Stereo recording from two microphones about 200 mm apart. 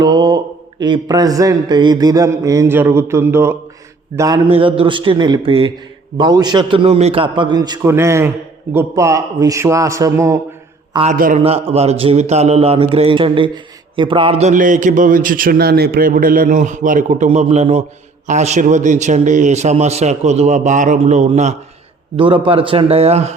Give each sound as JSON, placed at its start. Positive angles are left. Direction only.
{"t": 0.0, "sound": "a man's voice", "side_deg": -20}
{"t": 4.4, "sound": "a man's voice", "side_deg": -25}
{"t": 10.9, "sound": "a man's voice", "side_deg": -35}
{"t": 11.4, "sound": "a man's voice", "side_deg": -30}